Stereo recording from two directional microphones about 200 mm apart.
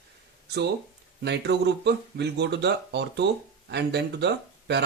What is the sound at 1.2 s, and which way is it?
Speech, 55° right (ahead or behind).